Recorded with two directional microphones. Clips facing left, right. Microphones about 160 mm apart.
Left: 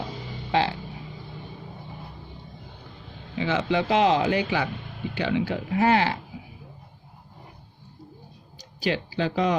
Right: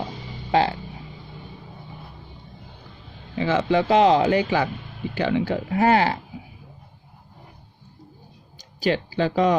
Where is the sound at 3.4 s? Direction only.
40° right (ahead or behind).